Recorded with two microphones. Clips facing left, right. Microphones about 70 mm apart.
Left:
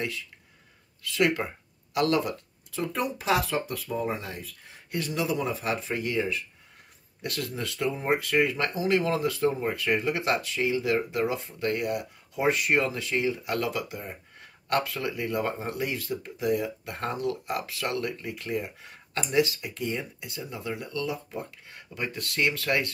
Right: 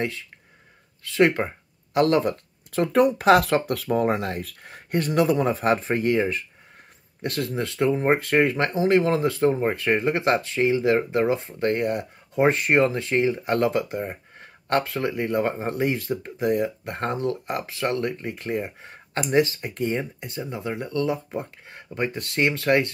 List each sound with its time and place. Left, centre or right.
1.0 s speech: right
2.7 s speech: right